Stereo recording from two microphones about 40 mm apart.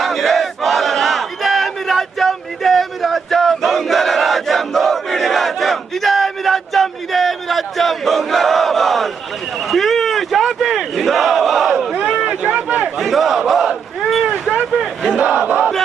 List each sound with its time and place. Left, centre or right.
0.0 s battle cry: centre
12.4 s a sound: right
13.0 s battle cry: centre
15.0 s crowd: centre
15.4 s battle cry: right